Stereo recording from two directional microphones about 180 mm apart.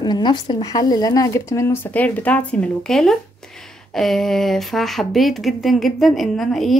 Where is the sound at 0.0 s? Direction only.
25° left (ahead or behind).